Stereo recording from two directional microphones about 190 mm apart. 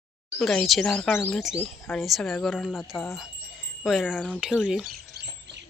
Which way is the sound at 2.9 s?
Centre (ahead or behind).